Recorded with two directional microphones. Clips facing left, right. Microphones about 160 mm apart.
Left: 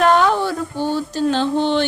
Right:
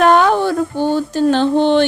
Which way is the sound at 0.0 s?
55° right (ahead or behind).